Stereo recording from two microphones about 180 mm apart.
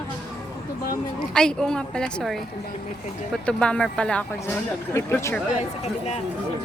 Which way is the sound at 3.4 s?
5° left (ahead or behind).